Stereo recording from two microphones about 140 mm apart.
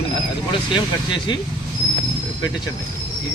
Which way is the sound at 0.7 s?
30° left (ahead or behind).